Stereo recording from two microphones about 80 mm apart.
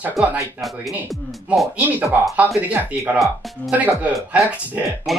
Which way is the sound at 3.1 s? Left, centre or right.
Centre.